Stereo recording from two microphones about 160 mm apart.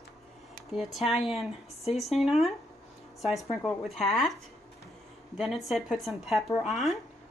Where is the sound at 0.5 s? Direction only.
Centre (ahead or behind).